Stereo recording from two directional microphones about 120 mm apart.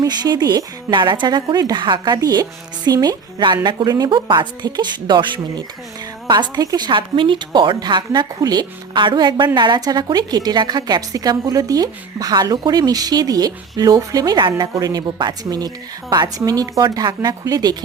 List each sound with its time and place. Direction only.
0.0 s a woman's voice: 35° right (ahead or behind)